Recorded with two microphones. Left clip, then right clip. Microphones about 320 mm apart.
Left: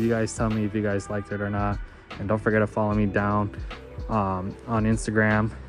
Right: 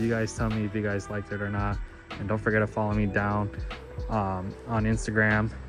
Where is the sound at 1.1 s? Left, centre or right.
Left.